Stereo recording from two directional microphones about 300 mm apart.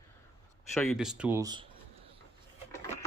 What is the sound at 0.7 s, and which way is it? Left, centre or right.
Speech, centre.